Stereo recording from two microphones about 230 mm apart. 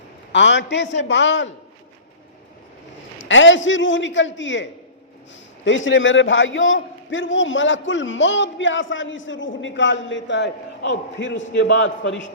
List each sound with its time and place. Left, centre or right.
0.3 s a man's voice: left
3.2 s a man's voice: left